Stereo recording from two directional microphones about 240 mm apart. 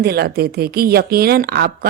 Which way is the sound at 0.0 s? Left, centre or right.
Right.